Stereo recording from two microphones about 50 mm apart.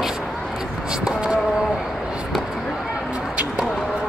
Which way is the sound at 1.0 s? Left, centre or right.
Right.